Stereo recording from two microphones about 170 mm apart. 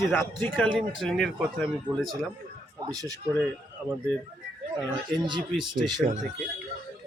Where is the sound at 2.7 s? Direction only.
20° right (ahead or behind).